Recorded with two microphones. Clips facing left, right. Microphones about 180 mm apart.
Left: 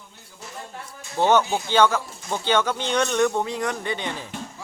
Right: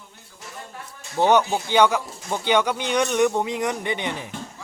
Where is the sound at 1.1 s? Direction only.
15° right (ahead or behind).